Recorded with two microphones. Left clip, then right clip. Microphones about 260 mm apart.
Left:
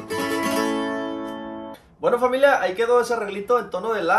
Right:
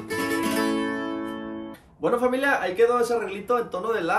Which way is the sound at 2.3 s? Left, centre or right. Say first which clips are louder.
Left 6 dB; centre.